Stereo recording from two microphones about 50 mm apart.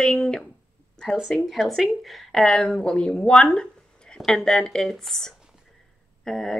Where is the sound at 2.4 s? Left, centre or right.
Centre.